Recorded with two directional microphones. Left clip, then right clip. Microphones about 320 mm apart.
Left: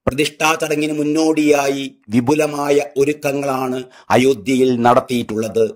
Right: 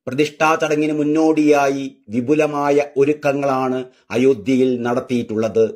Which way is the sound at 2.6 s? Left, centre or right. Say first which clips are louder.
Left 1 dB; left.